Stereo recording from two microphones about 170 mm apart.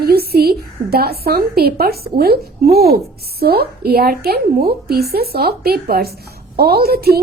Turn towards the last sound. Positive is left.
turn(degrees=-65)  # may be behind; listen again after turning